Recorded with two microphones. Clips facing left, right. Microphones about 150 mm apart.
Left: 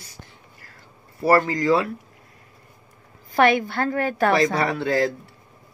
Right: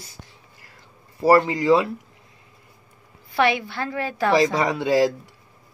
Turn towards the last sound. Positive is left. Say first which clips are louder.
# right 1 dB
turn(degrees=-20)  # may be behind; listen again after turning